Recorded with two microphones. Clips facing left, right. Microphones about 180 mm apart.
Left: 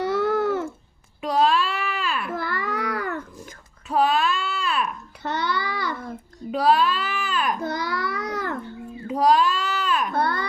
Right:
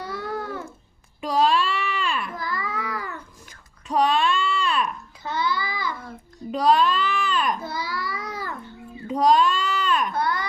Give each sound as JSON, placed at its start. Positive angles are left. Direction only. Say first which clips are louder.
{"t": 0.0, "sound": "babbling", "louder": "left 9 dB", "side_deg": 75}
{"t": 1.2, "sound": "a sound", "louder": "even", "side_deg": 0}
{"t": 2.3, "sound": "babbling", "louder": "left 3 dB", "side_deg": 70}
{"t": 3.8, "sound": "babbling", "louder": "even", "side_deg": 5}
{"t": 5.2, "sound": "child singing", "louder": "even", "side_deg": 70}
{"t": 6.5, "sound": "a sound", "louder": "even", "side_deg": 5}
{"t": 7.6, "sound": "child singing", "louder": "left 4 dB", "side_deg": 70}
{"t": 9.0, "sound": "a sound", "louder": "even", "side_deg": 5}
{"t": 10.1, "sound": "baby cry", "louder": "left 1 dB", "side_deg": 60}